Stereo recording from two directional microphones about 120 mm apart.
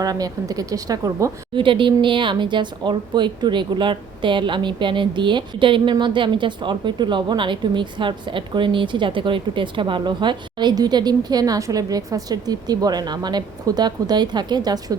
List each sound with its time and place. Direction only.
0.0 s a woman's voice: 30° right (ahead or behind)
1.5 s a woman's voice: 45° right (ahead or behind)